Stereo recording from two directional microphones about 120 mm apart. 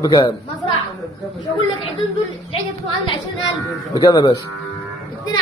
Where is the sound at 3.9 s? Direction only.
35° left (ahead or behind).